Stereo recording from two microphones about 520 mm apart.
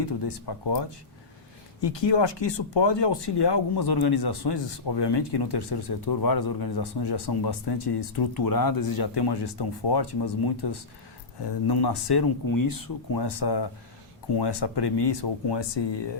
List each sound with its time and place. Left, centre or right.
0.0 s speech: left